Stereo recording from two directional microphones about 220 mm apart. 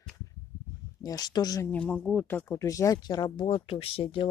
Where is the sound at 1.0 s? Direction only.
15° left (ahead or behind).